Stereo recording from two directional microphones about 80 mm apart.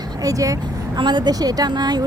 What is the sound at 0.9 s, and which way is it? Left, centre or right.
Speech, right.